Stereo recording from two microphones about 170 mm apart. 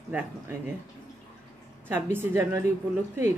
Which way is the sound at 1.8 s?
15° right (ahead or behind).